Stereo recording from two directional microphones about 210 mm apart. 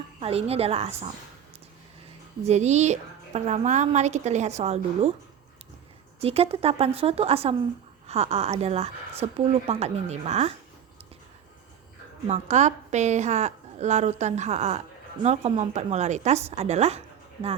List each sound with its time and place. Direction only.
0.2 s a woman's voice: 30° right (ahead or behind)
2.5 s a woman's voice: 35° right (ahead or behind)
6.1 s a woman's voice: 30° right (ahead or behind)
12.3 s a woman's voice: 35° right (ahead or behind)